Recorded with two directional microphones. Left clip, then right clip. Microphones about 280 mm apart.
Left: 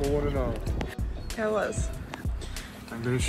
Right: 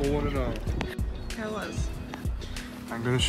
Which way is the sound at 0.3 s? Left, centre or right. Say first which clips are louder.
Left 1 dB; centre.